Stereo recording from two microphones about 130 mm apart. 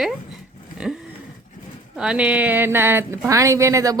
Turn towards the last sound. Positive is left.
turn(degrees=-25)  # may be behind; listen again after turning